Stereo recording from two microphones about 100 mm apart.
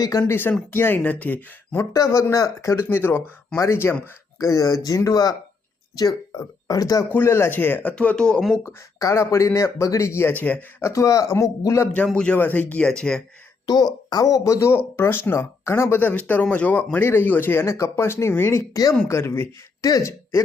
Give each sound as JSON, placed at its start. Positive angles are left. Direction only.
{"t": 0.0, "sound": "speech", "side_deg": 35}
{"t": 0.3, "sound": "speech", "side_deg": 20}
{"t": 1.9, "sound": "speech", "side_deg": 35}
{"t": 7.1, "sound": "speech", "side_deg": 25}
{"t": 8.6, "sound": "speech", "side_deg": 30}
{"t": 10.8, "sound": "speech", "side_deg": 30}
{"t": 12.1, "sound": "speech", "side_deg": 10}
{"t": 13.7, "sound": "speech", "side_deg": 40}